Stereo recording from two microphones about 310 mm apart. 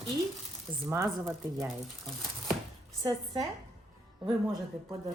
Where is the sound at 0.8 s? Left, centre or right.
Centre.